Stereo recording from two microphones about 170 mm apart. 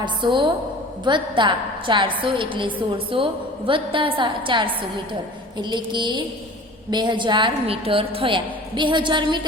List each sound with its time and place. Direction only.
0.0 s a woman's voice: 30° right (ahead or behind)